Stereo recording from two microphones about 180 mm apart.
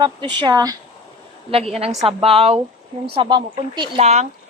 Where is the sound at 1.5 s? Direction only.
35° right (ahead or behind).